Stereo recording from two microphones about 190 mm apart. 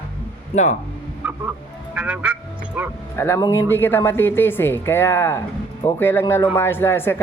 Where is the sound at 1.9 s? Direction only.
5° right (ahead or behind).